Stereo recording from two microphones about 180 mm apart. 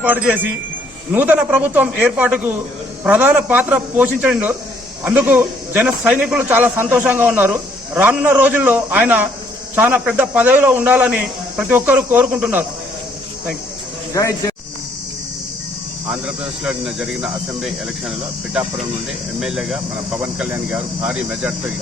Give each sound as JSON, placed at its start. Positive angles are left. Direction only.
{"t": 0.0, "sound": "a man's voice", "side_deg": -10}
{"t": 14.1, "sound": "speech", "side_deg": 15}
{"t": 16.6, "sound": "speech", "side_deg": -5}
{"t": 19.4, "sound": "a man's voice", "side_deg": -5}